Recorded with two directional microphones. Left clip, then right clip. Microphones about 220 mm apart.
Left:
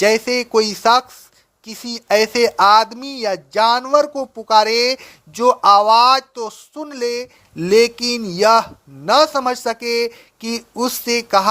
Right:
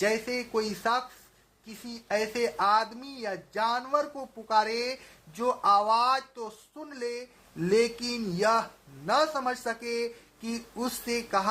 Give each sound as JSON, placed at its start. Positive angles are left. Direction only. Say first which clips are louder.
{"t": 0.0, "sound": "speech", "louder": "left 13 dB", "side_deg": 40}